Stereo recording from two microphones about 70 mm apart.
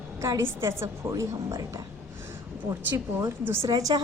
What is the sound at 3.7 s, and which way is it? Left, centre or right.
Speech, right.